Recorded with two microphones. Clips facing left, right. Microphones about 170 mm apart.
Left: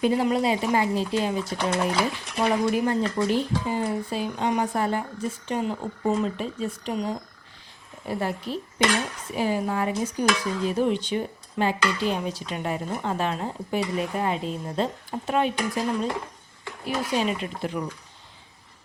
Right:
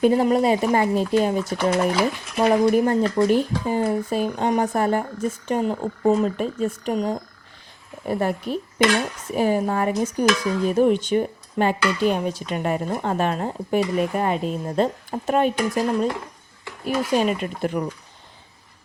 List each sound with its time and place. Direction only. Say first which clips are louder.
0.0 s speech: right 5 dB; 45° right (ahead or behind)